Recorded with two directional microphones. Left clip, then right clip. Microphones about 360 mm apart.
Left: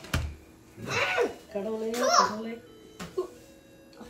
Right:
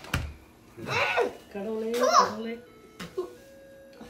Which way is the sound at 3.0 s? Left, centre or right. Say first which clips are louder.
Right 1 dB; centre.